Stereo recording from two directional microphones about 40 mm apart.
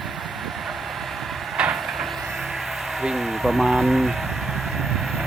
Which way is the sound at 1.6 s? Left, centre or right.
Right.